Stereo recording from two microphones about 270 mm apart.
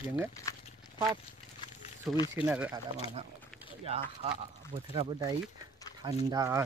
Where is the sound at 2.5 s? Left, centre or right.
Centre.